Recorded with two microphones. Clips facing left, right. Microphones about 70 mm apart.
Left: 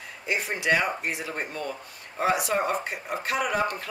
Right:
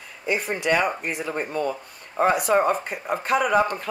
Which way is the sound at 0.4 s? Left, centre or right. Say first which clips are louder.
Right 2 dB; right.